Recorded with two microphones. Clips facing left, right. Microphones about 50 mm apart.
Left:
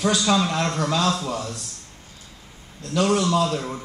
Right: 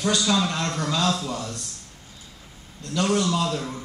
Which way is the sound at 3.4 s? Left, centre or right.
Centre.